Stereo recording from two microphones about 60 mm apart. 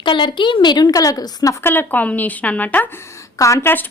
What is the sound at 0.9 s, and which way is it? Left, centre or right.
Speech, left.